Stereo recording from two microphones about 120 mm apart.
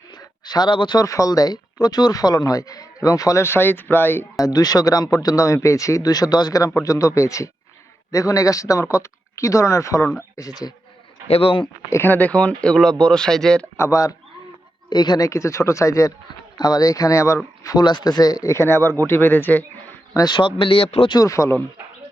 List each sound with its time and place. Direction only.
0.1 s speech: 35° left (ahead or behind); by 4.3 s 15° left (ahead or behind)
4.4 s speech: 30° left (ahead or behind)
11.3 s speech: 55° left (ahead or behind)
11.9 s speech: 20° left (ahead or behind)
13.7 s speech: 25° left (ahead or behind)
20.1 s speech: 40° left (ahead or behind); by 21.1 s 55° left (ahead or behind)
21.1 s speech: 30° left (ahead or behind)